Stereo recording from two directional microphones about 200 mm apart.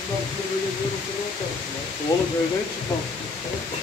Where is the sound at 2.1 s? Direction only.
15° left (ahead or behind).